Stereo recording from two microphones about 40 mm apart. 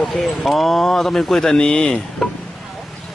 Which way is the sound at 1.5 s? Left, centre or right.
Left.